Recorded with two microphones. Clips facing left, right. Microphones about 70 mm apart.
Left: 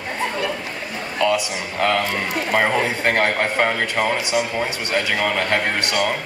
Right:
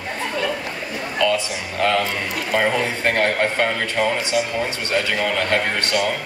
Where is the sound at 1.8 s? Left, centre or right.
Left.